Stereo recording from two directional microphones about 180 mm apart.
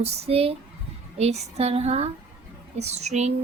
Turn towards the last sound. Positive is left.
turn(degrees=-40)  # may be behind; listen again after turning